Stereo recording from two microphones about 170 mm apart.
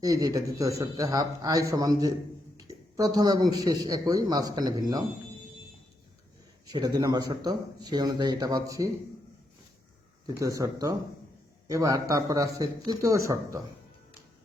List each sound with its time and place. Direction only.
0.0 s a man's voice: 20° right (ahead or behind)
6.7 s a man's voice: 25° right (ahead or behind)
10.2 s a man's voice: 20° right (ahead or behind)